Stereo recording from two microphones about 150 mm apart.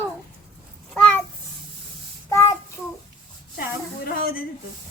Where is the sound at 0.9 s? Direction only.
10° left (ahead or behind).